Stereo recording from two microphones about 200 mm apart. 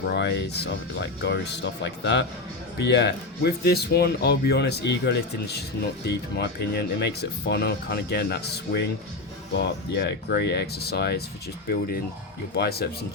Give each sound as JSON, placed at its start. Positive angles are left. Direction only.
{"t": 0.1, "sound": "speech", "side_deg": 60}
{"t": 12.5, "sound": "speech", "side_deg": 55}